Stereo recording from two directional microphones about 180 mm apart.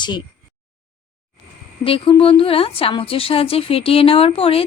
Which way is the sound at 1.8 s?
30° left (ahead or behind).